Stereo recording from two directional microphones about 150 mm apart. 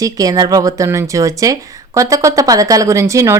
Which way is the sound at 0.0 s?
25° right (ahead or behind).